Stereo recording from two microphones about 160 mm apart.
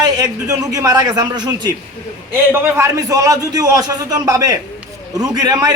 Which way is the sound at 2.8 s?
20° right (ahead or behind).